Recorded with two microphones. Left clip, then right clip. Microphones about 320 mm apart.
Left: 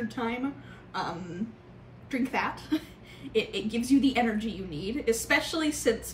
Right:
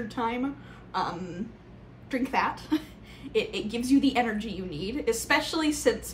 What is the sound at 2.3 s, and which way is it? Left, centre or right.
A woman's voice, centre.